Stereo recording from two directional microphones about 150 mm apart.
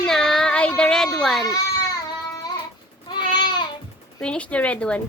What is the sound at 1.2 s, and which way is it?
Speech, centre (ahead or behind).